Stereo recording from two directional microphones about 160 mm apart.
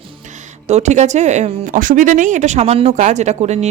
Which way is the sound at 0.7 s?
45° right (ahead or behind).